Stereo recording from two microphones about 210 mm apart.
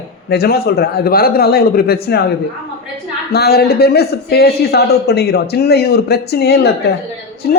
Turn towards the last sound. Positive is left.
turn(degrees=50)  # may be behind; listen again after turning